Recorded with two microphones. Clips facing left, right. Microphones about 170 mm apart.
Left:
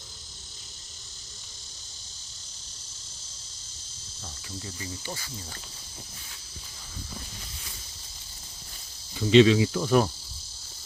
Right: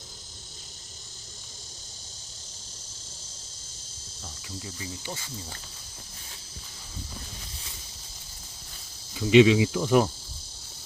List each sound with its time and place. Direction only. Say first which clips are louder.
4.6 s cricket: even; 15° right (ahead or behind)
9.1 s cricket: even; 10° right (ahead or behind)